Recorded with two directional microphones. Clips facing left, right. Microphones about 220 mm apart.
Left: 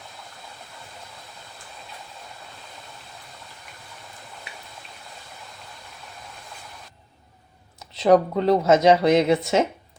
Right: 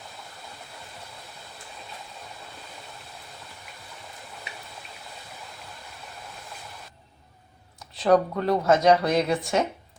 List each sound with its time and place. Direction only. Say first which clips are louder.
7.8 s speech: left 3 dB; 20° left (ahead or behind)